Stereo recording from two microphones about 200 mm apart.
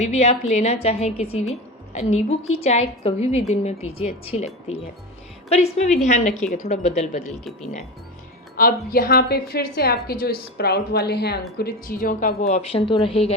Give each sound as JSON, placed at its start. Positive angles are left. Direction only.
{"t": 0.0, "sound": "a woman's voice", "side_deg": 35}
{"t": 8.5, "sound": "a woman's voice", "side_deg": 45}